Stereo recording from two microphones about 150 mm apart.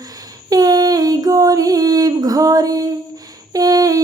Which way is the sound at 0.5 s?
25° right (ahead or behind).